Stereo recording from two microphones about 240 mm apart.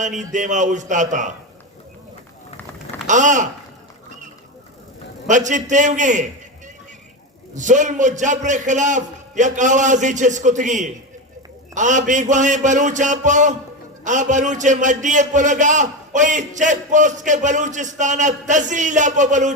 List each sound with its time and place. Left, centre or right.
0.0 s a man's voice: right
3.1 s a man's voice: right
5.3 s a man's voice: right
7.5 s a man's voice: right